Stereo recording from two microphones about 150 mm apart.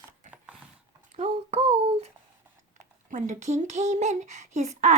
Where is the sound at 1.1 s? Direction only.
45° right (ahead or behind).